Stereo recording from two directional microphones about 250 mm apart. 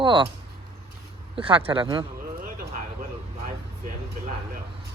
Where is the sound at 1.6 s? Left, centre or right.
Centre.